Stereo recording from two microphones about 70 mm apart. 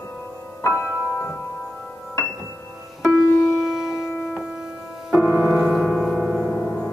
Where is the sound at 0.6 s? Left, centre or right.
Left.